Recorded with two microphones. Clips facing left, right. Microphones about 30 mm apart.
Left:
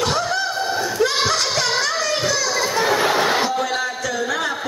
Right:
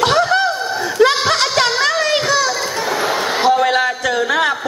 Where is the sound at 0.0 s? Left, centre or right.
Right.